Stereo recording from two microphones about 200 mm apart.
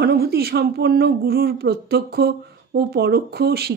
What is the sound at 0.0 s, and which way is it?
Speech, 50° right (ahead or behind).